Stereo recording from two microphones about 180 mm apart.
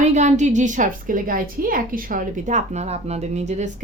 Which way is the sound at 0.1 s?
40° right (ahead or behind).